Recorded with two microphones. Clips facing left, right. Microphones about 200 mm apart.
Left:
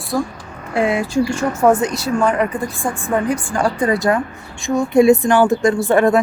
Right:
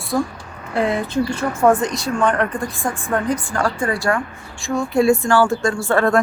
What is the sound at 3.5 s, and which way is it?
Speech, 15° left (ahead or behind).